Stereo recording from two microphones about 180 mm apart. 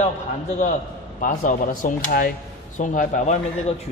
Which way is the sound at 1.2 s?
50° left (ahead or behind).